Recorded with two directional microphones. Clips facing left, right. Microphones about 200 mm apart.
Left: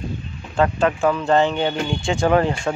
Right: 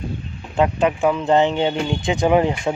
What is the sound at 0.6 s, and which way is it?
A man's voice, 15° right (ahead or behind).